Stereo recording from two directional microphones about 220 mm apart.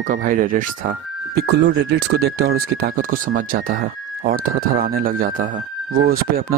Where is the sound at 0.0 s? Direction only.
40° right (ahead or behind).